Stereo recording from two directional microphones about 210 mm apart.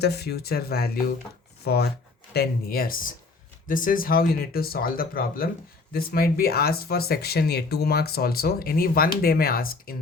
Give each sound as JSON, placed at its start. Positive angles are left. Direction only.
{"t": 0.0, "sound": "speech", "side_deg": 50}